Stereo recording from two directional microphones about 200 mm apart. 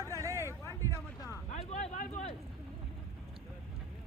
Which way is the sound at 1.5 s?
35° left (ahead or behind).